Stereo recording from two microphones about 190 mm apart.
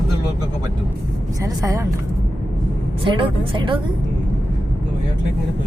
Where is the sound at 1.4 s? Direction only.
15° right (ahead or behind).